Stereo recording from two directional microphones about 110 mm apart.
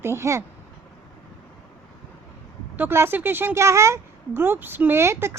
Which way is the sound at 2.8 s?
20° right (ahead or behind).